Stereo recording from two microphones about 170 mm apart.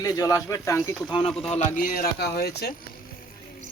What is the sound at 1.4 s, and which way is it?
Speech, 40° left (ahead or behind).